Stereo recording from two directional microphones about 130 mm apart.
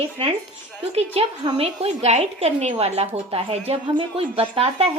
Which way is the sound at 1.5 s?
50° right (ahead or behind).